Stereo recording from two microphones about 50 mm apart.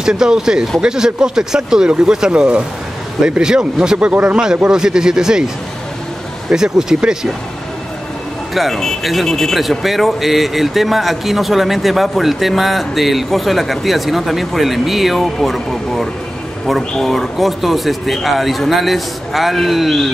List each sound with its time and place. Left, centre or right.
0.0 s speech: centre
6.5 s speech: centre
8.5 s speech: centre